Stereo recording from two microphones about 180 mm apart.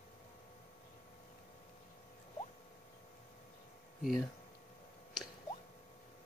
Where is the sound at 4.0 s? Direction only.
Centre (ahead or behind).